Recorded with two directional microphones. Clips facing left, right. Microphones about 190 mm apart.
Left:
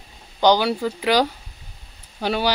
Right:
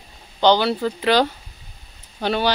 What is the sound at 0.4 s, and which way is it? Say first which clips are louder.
A woman's voice: right 1 dB; 10° left (ahead or behind).